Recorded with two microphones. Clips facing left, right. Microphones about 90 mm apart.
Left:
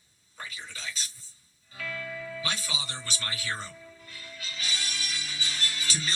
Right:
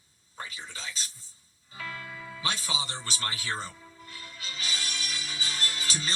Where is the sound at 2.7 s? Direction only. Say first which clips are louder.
Right 2 dB; 35° right (ahead or behind).